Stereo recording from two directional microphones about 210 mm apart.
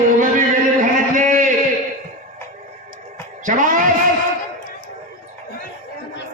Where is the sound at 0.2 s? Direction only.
40° right (ahead or behind).